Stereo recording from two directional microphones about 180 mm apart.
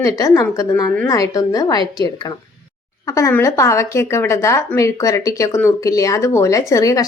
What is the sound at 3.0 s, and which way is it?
Speech, 15° left (ahead or behind).